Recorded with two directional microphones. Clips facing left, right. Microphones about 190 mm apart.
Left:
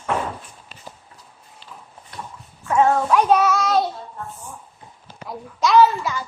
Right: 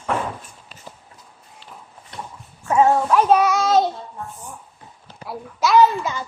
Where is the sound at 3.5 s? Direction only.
25° right (ahead or behind).